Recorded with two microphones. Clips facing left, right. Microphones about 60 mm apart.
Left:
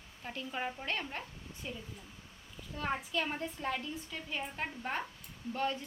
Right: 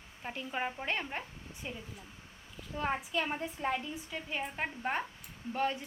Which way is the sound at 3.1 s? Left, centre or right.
Centre.